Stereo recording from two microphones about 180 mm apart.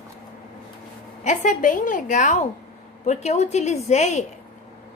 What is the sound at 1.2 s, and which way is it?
A woman's voice, 45° left (ahead or behind).